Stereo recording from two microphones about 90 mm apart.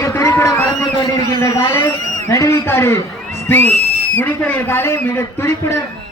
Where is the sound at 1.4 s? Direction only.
30° left (ahead or behind).